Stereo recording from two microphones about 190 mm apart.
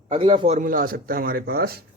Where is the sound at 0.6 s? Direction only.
50° right (ahead or behind).